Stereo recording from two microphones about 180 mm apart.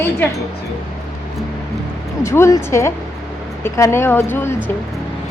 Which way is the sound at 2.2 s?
15° left (ahead or behind).